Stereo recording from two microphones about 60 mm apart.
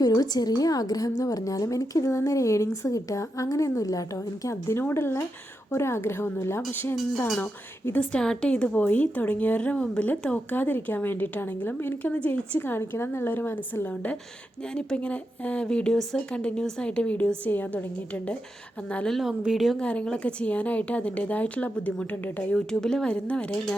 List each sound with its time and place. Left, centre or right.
0.1 s a woman's voice: left
4.7 s a woman's voice: left
8.1 s speech: centre
10.1 s a woman's voice: left
14.7 s speech: centre
19.3 s a woman's voice: centre
19.7 s speech: centre
22.5 s speech: centre